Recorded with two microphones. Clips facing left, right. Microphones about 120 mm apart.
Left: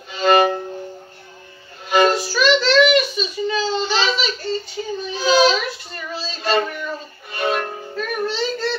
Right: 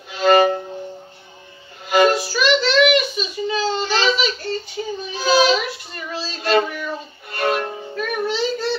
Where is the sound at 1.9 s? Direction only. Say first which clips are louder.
Right 1 dB; 5° right (ahead or behind).